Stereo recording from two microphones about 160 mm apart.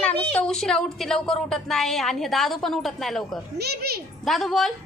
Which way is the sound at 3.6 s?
85° right.